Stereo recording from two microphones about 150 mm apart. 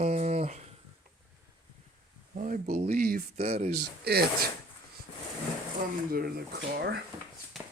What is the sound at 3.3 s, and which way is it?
Speech, 45° right (ahead or behind).